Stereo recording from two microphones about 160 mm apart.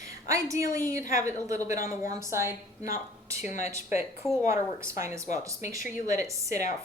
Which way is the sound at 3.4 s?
50° left (ahead or behind).